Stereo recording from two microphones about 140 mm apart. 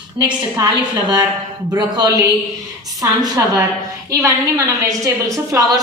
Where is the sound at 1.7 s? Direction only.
30° right (ahead or behind).